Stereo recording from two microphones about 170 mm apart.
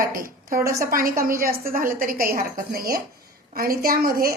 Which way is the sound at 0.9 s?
55° right (ahead or behind).